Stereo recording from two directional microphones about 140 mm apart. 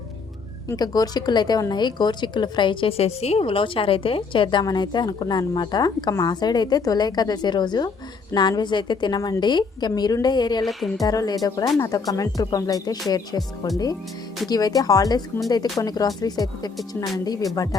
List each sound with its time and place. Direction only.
0.7 s a woman's voice: 30° left (ahead or behind)
10.6 s a woman's voice: centre (ahead or behind)
11.0 s speech: 25° left (ahead or behind)